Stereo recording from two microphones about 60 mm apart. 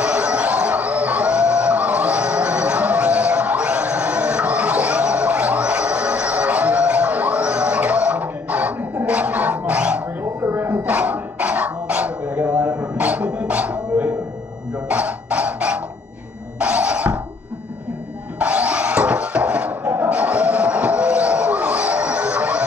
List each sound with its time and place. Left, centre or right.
0.0 s music: right
10.7 s dog: right
14.9 s music: right
18.4 s sawing: right